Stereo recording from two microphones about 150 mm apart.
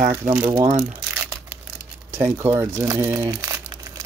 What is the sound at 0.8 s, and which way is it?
Crumpling, 10° right (ahead or behind).